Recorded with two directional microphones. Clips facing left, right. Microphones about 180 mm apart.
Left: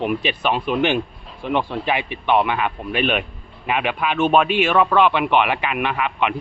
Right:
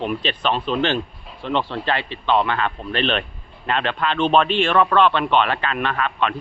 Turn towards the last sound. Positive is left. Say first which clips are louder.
# left 1 dB
turn(degrees=15)  # may be behind; listen again after turning